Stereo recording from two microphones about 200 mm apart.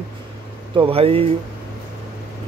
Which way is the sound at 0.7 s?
30° right (ahead or behind).